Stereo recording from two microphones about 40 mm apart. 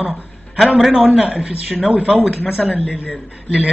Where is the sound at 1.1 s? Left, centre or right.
Centre.